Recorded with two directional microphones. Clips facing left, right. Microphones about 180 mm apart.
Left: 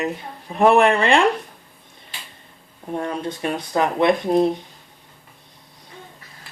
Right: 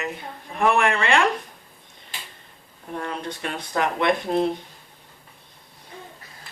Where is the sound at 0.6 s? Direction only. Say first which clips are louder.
Left 6 dB; 20° left (ahead or behind).